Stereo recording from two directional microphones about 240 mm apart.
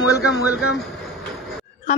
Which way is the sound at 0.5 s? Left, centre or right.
Centre.